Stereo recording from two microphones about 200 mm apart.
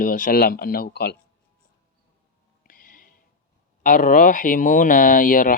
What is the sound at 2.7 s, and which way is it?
Music, 45° left (ahead or behind).